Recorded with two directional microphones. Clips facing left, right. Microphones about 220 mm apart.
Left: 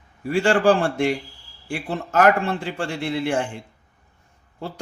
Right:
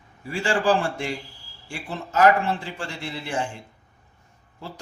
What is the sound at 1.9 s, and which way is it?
Speech, 55° left (ahead or behind).